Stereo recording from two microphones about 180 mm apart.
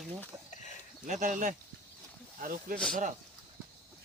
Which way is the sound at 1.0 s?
45° right (ahead or behind).